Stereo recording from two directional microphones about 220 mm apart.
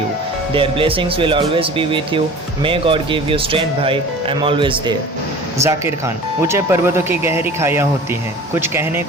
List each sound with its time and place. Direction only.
0.5 s speech: 25° right (ahead or behind)